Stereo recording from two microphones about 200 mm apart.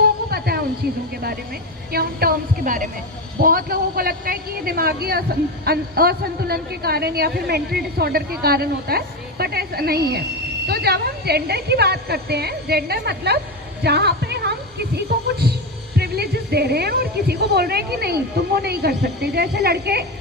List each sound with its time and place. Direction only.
0.0 s a sound: 50° right (ahead or behind)
1.9 s a woman's voice: 50° right (ahead or behind)
16.0 s a woman's voice: 55° right (ahead or behind)